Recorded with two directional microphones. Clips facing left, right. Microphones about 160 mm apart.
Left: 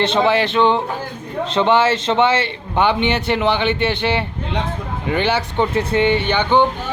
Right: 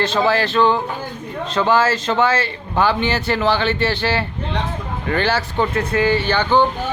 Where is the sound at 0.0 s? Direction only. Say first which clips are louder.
Left 2 dB; 20° left (ahead or behind).